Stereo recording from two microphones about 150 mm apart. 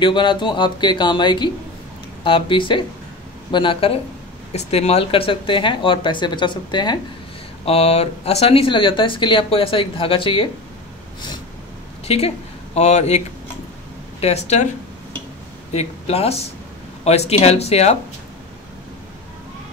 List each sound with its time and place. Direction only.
0.0 s speech: 30° left (ahead or behind)
7.6 s speech: 40° left (ahead or behind)
12.1 s speech: 45° left (ahead or behind)
14.2 s speech: 45° left (ahead or behind)
15.7 s speech: 45° left (ahead or behind)